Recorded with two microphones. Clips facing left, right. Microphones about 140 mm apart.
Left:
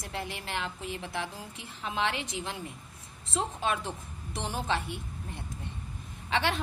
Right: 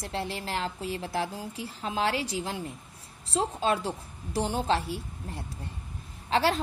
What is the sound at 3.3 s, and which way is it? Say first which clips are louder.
A woman's voice: right 4 dB; 30° right (ahead or behind).